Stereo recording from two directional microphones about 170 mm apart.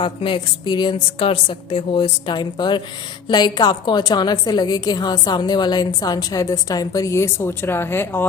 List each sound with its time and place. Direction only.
0.0 s a woman's voice: 30° left (ahead or behind); by 8.3 s 10° left (ahead or behind)